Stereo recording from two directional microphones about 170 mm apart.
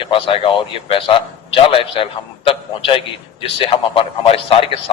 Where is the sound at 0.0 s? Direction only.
30° left (ahead or behind).